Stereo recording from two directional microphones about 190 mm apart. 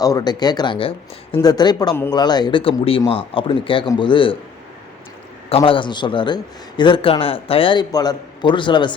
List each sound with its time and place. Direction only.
0.0 s a man's voice: 20° left (ahead or behind)
5.5 s a man's voice: 30° left (ahead or behind)